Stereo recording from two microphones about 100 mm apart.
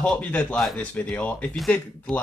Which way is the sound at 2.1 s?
Centre (ahead or behind).